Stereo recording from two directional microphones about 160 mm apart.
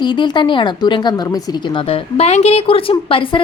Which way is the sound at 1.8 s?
40° left (ahead or behind).